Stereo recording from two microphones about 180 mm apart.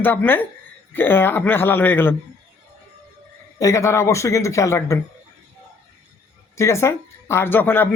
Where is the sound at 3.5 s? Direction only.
15° left (ahead or behind).